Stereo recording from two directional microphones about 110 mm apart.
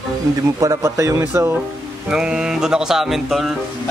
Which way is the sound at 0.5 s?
30° right (ahead or behind).